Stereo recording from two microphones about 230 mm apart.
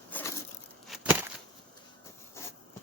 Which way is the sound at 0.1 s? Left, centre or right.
Centre.